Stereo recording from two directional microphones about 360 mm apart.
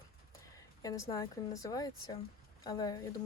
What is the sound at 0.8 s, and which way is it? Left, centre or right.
Speech, centre.